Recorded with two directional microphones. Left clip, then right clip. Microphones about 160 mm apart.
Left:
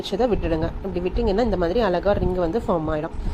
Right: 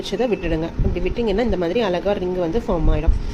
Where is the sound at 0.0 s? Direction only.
20° left (ahead or behind).